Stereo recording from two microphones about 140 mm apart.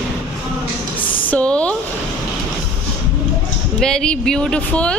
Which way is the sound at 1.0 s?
35° left (ahead or behind).